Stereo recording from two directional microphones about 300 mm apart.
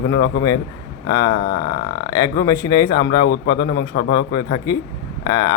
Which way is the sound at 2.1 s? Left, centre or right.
Centre.